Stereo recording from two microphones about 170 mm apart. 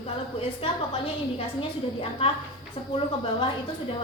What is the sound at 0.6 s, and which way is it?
A woman's voice, 30° left (ahead or behind).